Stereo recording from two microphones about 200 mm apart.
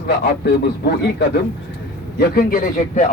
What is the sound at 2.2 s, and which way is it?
Speech, 50° left (ahead or behind).